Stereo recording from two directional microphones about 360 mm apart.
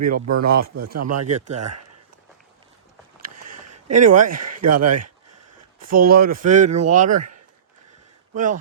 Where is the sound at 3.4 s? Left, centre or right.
Right.